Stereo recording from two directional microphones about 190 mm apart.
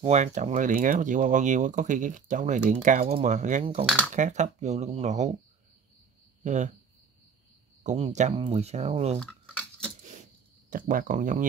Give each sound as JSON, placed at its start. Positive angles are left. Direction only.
{"t": 0.0, "sound": "speech", "side_deg": -35}
{"t": 3.8, "sound": "speech", "side_deg": 0}
{"t": 4.1, "sound": "speech", "side_deg": -40}
{"t": 6.4, "sound": "speech", "side_deg": -40}
{"t": 7.8, "sound": "speech", "side_deg": -35}
{"t": 9.2, "sound": "cutlery", "side_deg": 5}
{"t": 10.7, "sound": "speech", "side_deg": -45}